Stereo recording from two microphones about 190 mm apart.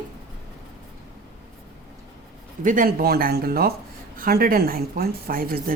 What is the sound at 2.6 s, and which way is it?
A woman's voice, 45° right (ahead or behind).